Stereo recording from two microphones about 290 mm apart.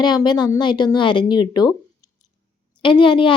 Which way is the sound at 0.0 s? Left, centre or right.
Centre.